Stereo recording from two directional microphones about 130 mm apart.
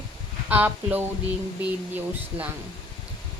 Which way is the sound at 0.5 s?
15° right (ahead or behind).